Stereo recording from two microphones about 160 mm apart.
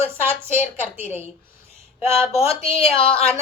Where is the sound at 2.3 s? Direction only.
35° left (ahead or behind).